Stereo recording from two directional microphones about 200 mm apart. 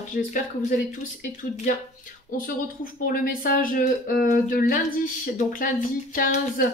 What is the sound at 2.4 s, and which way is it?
Speech, 45° left (ahead or behind).